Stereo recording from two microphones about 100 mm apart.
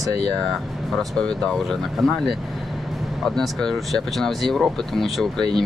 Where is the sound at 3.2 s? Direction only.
5° left (ahead or behind).